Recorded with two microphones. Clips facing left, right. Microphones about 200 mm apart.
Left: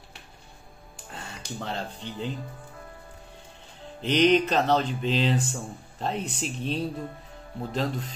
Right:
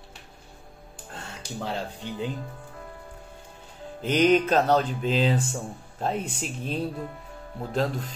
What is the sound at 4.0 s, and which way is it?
Speech, 5° right (ahead or behind).